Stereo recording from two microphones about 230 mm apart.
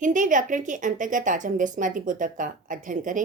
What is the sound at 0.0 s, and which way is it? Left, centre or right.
A woman's voice, right.